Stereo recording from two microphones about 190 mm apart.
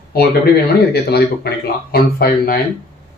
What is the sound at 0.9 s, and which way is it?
Speech, 55° left (ahead or behind).